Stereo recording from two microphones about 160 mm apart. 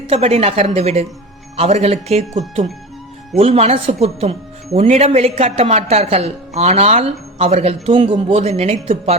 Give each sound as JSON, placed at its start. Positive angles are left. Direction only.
{"t": 0.1, "sound": "speech", "side_deg": -40}
{"t": 3.3, "sound": "speech", "side_deg": -40}